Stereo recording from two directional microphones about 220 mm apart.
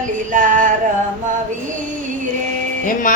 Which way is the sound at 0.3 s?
35° right (ahead or behind).